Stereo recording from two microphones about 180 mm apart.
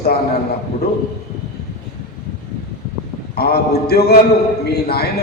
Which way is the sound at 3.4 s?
60° left (ahead or behind).